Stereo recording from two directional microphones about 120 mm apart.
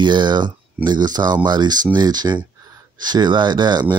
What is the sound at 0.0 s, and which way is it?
Speech, 40° right (ahead or behind).